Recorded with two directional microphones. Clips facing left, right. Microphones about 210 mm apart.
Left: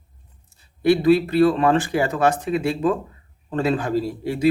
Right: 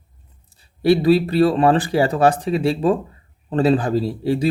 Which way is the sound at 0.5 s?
35° right (ahead or behind).